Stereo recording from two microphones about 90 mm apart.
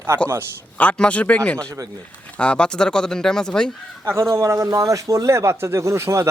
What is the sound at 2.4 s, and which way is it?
Speech, 10° left (ahead or behind).